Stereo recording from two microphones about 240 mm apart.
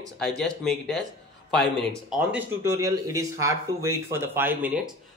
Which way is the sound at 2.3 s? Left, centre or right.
Centre.